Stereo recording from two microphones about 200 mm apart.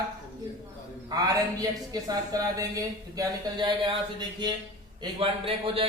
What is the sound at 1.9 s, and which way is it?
A man's voice, 20° right (ahead or behind).